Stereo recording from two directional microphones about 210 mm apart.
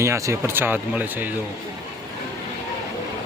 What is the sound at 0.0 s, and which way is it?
Speech, 15° right (ahead or behind).